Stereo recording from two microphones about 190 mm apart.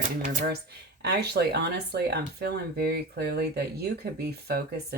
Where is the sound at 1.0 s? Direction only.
60° right (ahead or behind).